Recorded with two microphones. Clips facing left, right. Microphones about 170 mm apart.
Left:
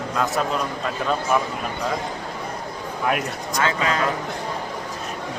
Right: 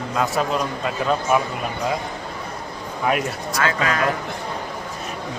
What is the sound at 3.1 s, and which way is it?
Speech, centre (ahead or behind).